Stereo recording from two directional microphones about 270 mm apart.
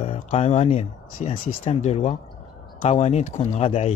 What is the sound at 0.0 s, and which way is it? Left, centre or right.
Speech, left.